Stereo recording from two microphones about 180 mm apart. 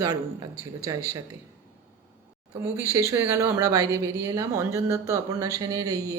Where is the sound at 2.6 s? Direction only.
15° right (ahead or behind).